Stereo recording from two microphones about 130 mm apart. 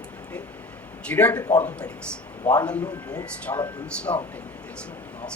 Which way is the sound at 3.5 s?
25° left (ahead or behind).